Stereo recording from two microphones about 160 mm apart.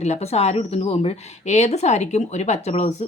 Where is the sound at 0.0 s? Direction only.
40° left (ahead or behind).